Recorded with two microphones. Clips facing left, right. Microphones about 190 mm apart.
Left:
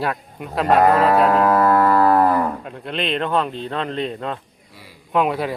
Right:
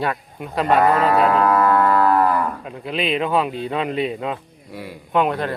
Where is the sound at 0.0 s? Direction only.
Centre (ahead or behind).